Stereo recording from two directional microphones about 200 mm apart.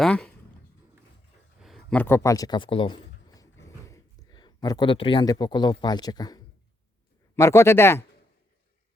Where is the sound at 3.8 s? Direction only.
15° left (ahead or behind).